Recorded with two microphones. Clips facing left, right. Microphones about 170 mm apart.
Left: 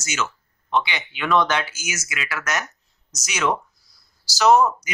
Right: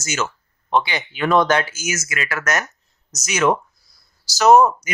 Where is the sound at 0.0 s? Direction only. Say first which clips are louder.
Right 3 dB; 40° right (ahead or behind).